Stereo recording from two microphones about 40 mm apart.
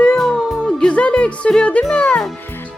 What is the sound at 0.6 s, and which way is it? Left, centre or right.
Music, left.